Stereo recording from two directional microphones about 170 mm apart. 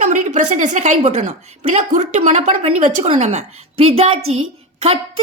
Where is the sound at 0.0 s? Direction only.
45° right (ahead or behind).